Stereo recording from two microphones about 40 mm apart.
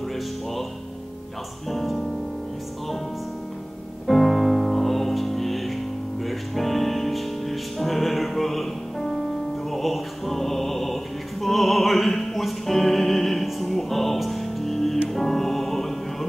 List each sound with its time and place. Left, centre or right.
1.7 s music: centre
4.1 s music: centre